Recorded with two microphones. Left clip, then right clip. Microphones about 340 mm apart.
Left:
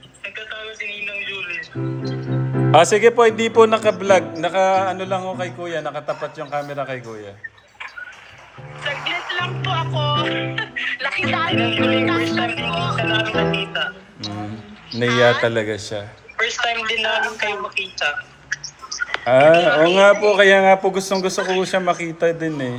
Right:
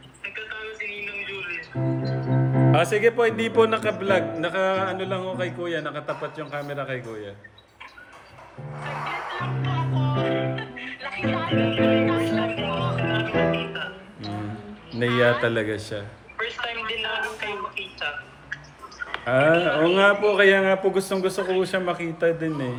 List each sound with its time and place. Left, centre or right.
0.2 s speech: centre
2.7 s a man's voice: centre
8.8 s music: left
15.1 s speech: left
15.4 s a man's voice: centre
16.4 s a sound: left
19.2 s a man's voice: centre